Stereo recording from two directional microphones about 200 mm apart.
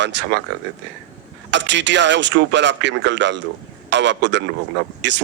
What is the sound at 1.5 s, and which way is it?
Speech, 60° right (ahead or behind).